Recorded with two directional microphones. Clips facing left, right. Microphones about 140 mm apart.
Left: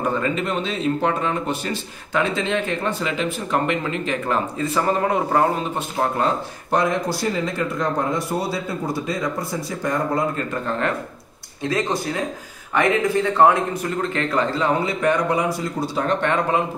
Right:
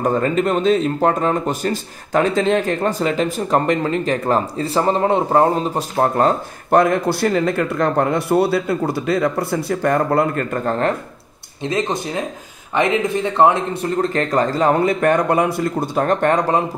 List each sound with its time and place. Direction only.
0.0 s speech: 45° right (ahead or behind)
11.6 s speech: 20° right (ahead or behind); by 16.6 s 40° right (ahead or behind)